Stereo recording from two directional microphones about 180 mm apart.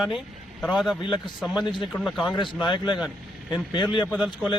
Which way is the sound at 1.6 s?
25° left (ahead or behind).